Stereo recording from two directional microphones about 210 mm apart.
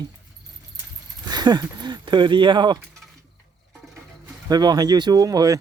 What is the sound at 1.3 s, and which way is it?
Speech, 20° right (ahead or behind).